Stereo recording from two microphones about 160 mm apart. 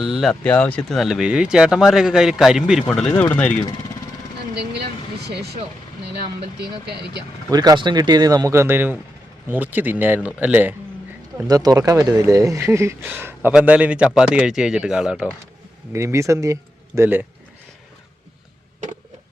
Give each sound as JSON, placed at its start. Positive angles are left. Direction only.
{"t": 0.0, "sound": "speech", "side_deg": 0}
{"t": 2.8, "sound": "speech", "side_deg": 5}
{"t": 3.1, "sound": "speech", "side_deg": 20}
{"t": 3.3, "sound": "speech", "side_deg": 10}
{"t": 6.6, "sound": "speech", "side_deg": -90}
{"t": 7.5, "sound": "a man's voice", "side_deg": -25}
{"t": 11.4, "sound": "speech", "side_deg": -25}
{"t": 15.9, "sound": "a man's voice", "side_deg": -20}